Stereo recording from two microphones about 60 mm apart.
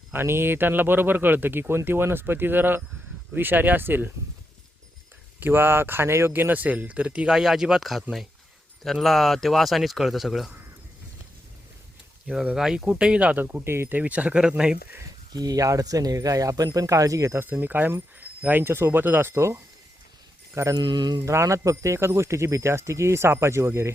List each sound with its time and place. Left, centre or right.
0.1 s speech: right
5.4 s speech: right; by 10.5 s centre
12.5 s speech: centre
13.4 s speech: right; by 14.5 s centre
15.4 s speech: right
17.4 s speech: right
18.2 s a sound: right
18.6 s speech: right
19.3 s speech: right
20.6 s speech: right